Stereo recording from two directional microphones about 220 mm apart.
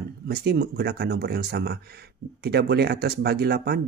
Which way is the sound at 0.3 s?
45° right (ahead or behind).